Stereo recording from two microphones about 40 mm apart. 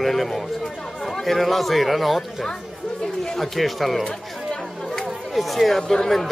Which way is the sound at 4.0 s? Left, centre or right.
Centre.